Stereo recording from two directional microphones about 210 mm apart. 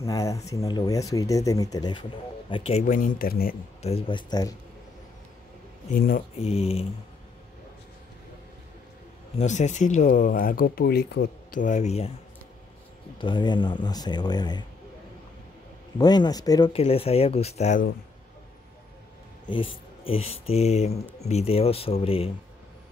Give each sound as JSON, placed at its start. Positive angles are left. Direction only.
{"t": 0.0, "sound": "speech", "side_deg": 15}
{"t": 3.8, "sound": "speech", "side_deg": 25}
{"t": 5.9, "sound": "speech", "side_deg": 45}
{"t": 6.4, "sound": "speech", "side_deg": 30}
{"t": 9.4, "sound": "speech", "side_deg": 35}
{"t": 13.2, "sound": "speech", "side_deg": 20}
{"t": 16.0, "sound": "speech", "side_deg": 20}
{"t": 20.1, "sound": "speech", "side_deg": 30}